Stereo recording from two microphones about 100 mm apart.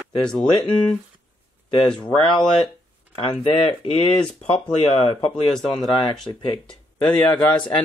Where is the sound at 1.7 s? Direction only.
50° left (ahead or behind).